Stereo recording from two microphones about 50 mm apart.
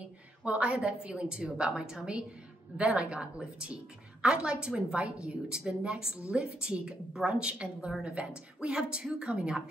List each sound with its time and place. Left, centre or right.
0.4 s a woman's voice: right